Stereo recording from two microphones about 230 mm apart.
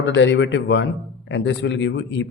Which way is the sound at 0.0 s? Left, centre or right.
Left.